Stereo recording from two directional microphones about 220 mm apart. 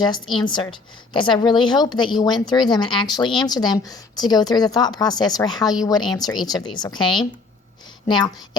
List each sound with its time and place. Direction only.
0.3 s a woman's voice: 20° left (ahead or behind)